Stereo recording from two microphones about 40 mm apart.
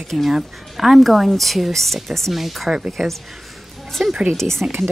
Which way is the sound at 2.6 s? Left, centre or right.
Centre.